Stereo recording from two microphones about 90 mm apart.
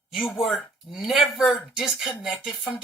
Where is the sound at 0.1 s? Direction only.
Centre (ahead or behind).